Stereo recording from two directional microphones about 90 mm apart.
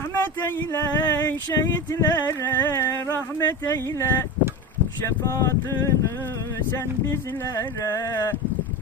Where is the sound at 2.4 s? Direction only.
25° left (ahead or behind).